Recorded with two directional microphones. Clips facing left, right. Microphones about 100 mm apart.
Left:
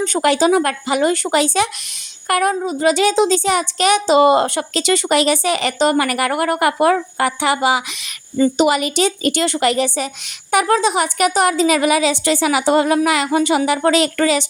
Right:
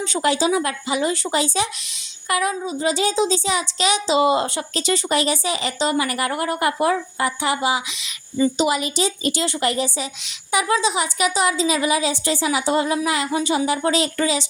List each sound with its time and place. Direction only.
0.0 s a woman's voice: 60° left (ahead or behind)